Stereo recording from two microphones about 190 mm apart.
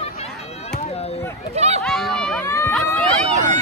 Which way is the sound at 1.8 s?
Centre (ahead or behind).